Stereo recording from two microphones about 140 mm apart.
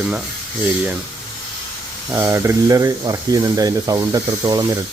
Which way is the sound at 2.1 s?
20° right (ahead or behind).